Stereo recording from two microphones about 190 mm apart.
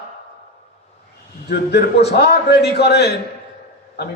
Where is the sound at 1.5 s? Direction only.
60° left (ahead or behind).